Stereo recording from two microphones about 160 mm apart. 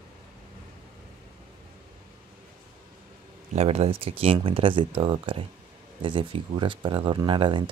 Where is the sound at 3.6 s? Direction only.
40° right (ahead or behind).